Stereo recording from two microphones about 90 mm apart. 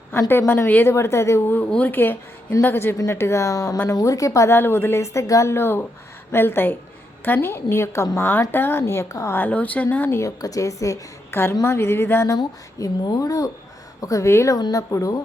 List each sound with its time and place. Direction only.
0.3 s a woman's voice: 25° left (ahead or behind)
9.4 s speech: 15° left (ahead or behind)
10.2 s a woman's voice: 40° left (ahead or behind)
11.6 s a woman's voice: 25° left (ahead or behind)
12.4 s a woman's voice: 50° left (ahead or behind)